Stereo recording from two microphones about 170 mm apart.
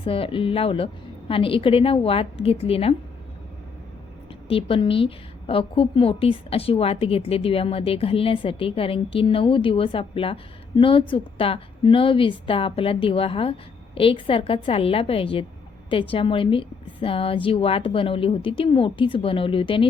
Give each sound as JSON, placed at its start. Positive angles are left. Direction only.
{"t": 0.0, "sound": "a woman's voice", "side_deg": 30}
{"t": 4.4, "sound": "a woman's voice", "side_deg": 30}